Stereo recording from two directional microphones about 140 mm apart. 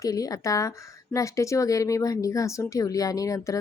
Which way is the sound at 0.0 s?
25° left (ahead or behind).